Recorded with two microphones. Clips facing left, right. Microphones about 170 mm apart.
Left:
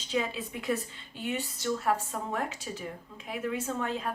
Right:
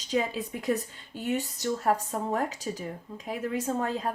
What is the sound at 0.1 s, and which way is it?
Speech, 40° right (ahead or behind).